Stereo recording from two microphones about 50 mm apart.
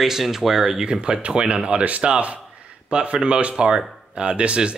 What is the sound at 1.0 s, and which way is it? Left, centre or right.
Speech, centre.